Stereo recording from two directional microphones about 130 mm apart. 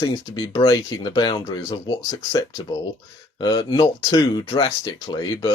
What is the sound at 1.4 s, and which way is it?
Speech, 25° left (ahead or behind).